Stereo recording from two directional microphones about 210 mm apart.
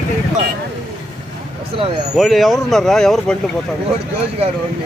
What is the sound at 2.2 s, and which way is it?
Speech, centre (ahead or behind).